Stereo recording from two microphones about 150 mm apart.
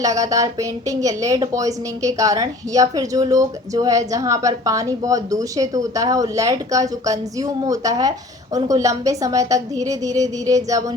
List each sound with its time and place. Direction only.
0.0 s a woman's voice: 20° right (ahead or behind)